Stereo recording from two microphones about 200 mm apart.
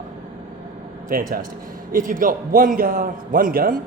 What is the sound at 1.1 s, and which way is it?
A man's voice, 45° right (ahead or behind).